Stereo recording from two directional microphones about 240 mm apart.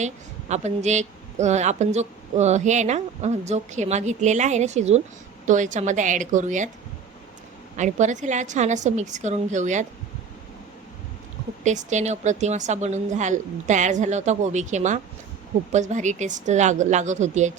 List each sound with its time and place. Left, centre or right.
0.0 s a woman's voice: right
7.8 s a woman's voice: right
11.6 s a woman's voice: right